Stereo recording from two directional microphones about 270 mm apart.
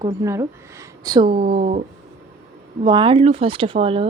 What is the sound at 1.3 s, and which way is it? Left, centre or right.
Speech, right.